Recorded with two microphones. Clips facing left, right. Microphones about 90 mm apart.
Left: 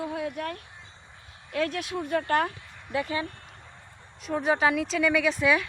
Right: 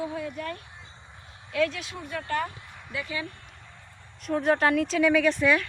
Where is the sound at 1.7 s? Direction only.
55° left (ahead or behind).